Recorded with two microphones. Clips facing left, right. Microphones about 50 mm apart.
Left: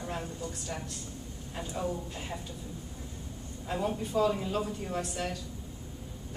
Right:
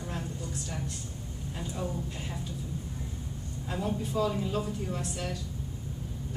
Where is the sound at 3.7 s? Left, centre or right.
Centre.